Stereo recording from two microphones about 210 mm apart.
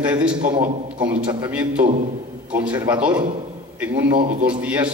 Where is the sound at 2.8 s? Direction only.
10° right (ahead or behind).